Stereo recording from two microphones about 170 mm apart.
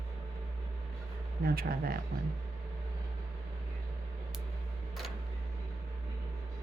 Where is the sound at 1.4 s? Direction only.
60° right (ahead or behind).